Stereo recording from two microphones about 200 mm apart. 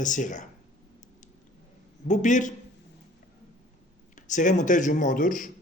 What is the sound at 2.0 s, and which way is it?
Speech, 40° left (ahead or behind).